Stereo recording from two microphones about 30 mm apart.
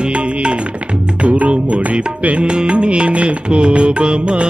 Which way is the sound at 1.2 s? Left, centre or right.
Right.